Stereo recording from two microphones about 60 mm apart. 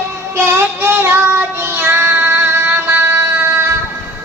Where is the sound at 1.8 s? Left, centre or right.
Right.